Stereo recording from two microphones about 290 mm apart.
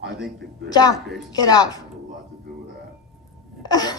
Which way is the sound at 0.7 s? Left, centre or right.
Centre.